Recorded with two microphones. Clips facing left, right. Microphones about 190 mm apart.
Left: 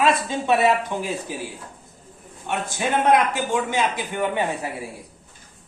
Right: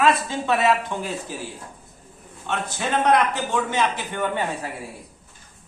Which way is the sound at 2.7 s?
10° left (ahead or behind).